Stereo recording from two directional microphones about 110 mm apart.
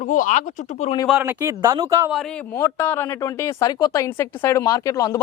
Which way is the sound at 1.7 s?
35° right (ahead or behind).